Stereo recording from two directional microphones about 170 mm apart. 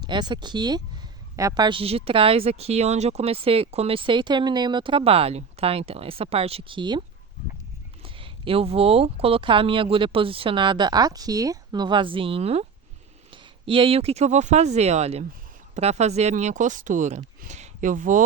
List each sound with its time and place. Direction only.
0.0 s a woman's voice: 25° right (ahead or behind)
8.0 s a woman's voice: 30° right (ahead or behind); by 18.2 s 50° right (ahead or behind)